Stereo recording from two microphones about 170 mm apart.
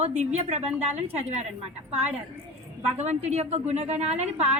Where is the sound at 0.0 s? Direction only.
40° right (ahead or behind).